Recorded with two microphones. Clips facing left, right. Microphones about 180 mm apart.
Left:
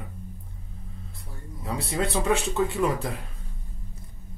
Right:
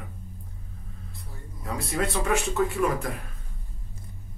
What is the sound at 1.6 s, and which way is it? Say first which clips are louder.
Speech: left 1 dB; 30° left (ahead or behind).